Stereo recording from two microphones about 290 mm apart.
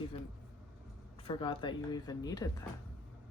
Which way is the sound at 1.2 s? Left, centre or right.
Centre.